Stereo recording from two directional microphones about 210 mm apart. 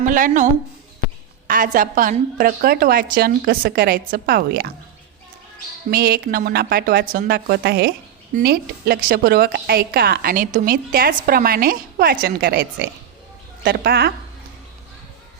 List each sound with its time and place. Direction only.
0.1 s speech: 40° right (ahead or behind)
1.5 s a woman's voice: 40° right (ahead or behind)
5.9 s a woman's voice: 45° right (ahead or behind)